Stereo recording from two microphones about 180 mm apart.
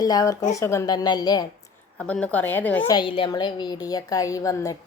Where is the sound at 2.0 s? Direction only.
5° left (ahead or behind).